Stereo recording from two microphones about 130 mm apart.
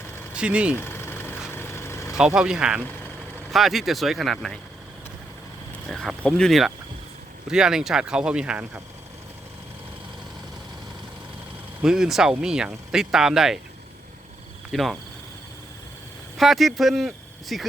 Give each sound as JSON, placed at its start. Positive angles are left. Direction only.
{"t": 0.3, "sound": "speech", "side_deg": -10}
{"t": 0.8, "sound": "vehicle", "side_deg": 15}
{"t": 2.1, "sound": "speech", "side_deg": -5}
{"t": 5.9, "sound": "speech", "side_deg": 5}
{"t": 11.8, "sound": "speech", "side_deg": -5}
{"t": 14.7, "sound": "speech", "side_deg": 0}
{"t": 16.4, "sound": "speech", "side_deg": 0}